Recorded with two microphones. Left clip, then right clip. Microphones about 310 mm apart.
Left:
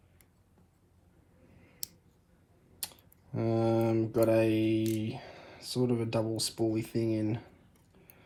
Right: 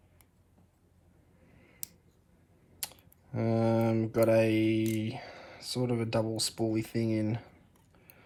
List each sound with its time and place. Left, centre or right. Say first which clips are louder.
3.3 s mantra: even; centre